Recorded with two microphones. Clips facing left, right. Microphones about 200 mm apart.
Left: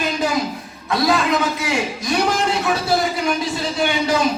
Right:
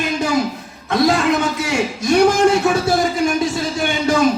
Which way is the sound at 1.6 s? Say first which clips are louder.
Right 3 dB; 45° right (ahead or behind).